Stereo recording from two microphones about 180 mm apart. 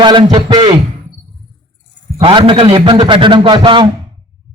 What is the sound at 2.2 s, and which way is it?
A man's voice, 30° right (ahead or behind).